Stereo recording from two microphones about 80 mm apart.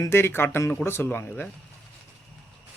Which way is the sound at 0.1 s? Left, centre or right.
Left.